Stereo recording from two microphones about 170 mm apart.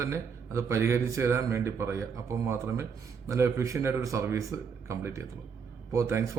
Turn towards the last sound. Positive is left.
turn(degrees=-15)  # may be behind; listen again after turning